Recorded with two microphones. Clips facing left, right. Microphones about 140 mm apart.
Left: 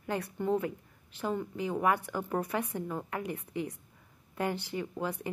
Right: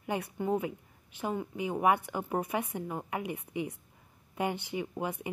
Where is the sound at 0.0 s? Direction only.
15° right (ahead or behind).